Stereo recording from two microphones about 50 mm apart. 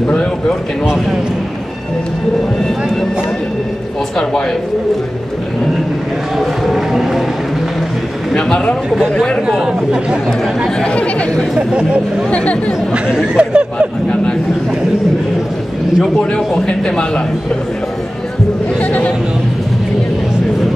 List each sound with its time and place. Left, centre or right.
0.1 s speech: centre
6.3 s speech: centre
8.4 s speech: centre
10.8 s speech: left
11.5 s speech: right
12.3 s speech: left
12.9 s speech: centre
16.2 s speech: left
18.8 s speech: left